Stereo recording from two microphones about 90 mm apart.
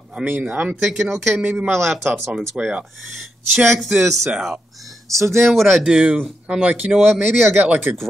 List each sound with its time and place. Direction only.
0.2 s speech: 20° right (ahead or behind)
1.0 s speech: centre (ahead or behind)
1.4 s speech: 15° right (ahead or behind)
2.0 s speech: 30° right (ahead or behind)
2.5 s speech: 15° right (ahead or behind)
3.5 s speech: centre (ahead or behind)
5.1 s speech: 30° right (ahead or behind)
5.5 s speech: centre (ahead or behind)
5.9 s speech: 10° right (ahead or behind)